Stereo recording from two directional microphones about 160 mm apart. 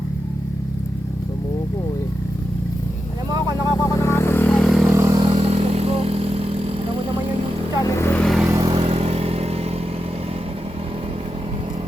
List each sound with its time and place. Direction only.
3.8 s vehicle: 20° left (ahead or behind); by 4.9 s centre (ahead or behind)
4.9 s vehicle: 20° right (ahead or behind)
5.2 s vehicle: 40° right (ahead or behind)
7.9 s vehicle: 15° left (ahead or behind)
8.2 s vehicle: centre (ahead or behind)
8.6 s vehicle: 35° right (ahead or behind)